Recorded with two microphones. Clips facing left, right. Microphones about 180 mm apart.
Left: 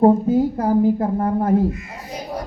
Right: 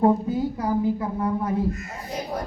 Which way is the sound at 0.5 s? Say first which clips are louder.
Left 6 dB; 50° left (ahead or behind).